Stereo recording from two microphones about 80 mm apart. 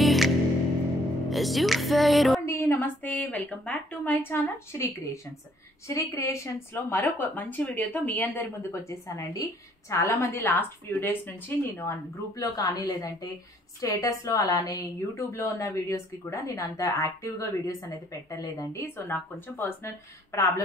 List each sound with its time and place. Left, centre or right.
0.0 s music: centre
1.3 s speech: centre
2.4 s a woman's voice: left
5.9 s a woman's voice: left
8.8 s a woman's voice: left
15.1 s speech: left
19.0 s a woman's voice: left